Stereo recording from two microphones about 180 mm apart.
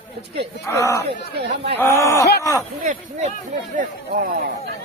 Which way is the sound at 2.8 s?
50° right (ahead or behind).